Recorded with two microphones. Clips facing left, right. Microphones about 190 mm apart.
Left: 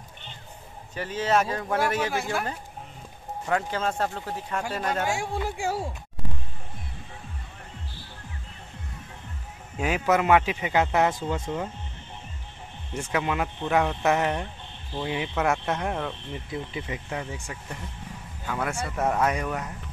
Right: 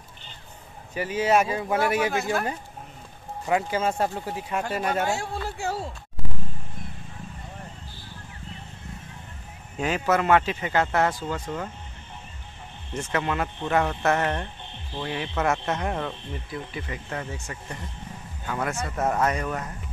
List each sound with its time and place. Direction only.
0.9 s speech: 10° right (ahead or behind)
3.4 s speech: 10° right (ahead or behind)
5.0 s a man's voice: 15° left (ahead or behind)
9.8 s a man's voice: 10° left (ahead or behind)
12.9 s a man's voice: 5° left (ahead or behind)
15.3 s speech: centre (ahead or behind)
16.4 s a man's voice: 20° left (ahead or behind)